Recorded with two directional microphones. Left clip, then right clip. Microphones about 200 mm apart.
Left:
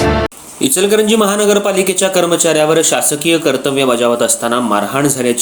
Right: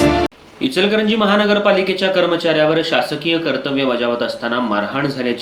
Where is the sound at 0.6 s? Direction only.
45° left (ahead or behind).